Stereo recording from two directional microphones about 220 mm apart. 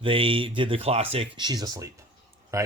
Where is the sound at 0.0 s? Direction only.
25° right (ahead or behind).